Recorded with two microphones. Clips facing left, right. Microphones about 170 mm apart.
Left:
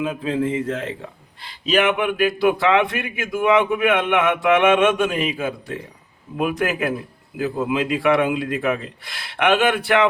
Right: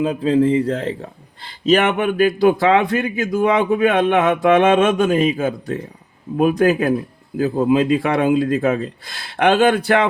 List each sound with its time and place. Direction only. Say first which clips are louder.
0.0 s speech: right 6 dB; 35° right (ahead or behind)